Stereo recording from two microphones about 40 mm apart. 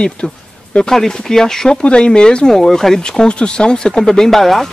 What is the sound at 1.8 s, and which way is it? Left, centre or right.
Speech, left.